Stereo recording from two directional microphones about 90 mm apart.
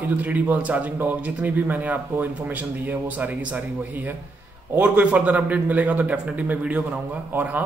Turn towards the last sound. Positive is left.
turn(degrees=-20)  # may be behind; listen again after turning